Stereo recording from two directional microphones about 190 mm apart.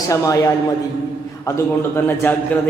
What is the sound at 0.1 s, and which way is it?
Speech, 15° left (ahead or behind).